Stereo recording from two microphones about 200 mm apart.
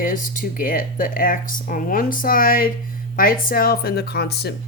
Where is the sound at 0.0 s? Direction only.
40° left (ahead or behind).